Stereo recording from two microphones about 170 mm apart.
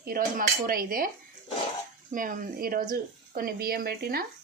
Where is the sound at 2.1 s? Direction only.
50° right (ahead or behind).